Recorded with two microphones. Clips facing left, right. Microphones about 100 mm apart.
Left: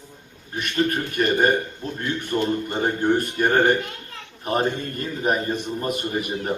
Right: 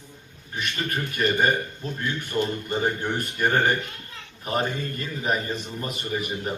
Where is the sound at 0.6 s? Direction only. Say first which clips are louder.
Left 6 dB; 45° left (ahead or behind).